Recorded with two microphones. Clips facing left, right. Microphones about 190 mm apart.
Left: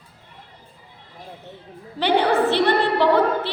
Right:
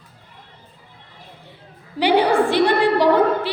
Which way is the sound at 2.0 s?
10° right (ahead or behind).